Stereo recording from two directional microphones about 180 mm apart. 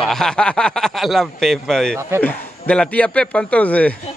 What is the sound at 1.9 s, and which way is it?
Speech, 15° right (ahead or behind).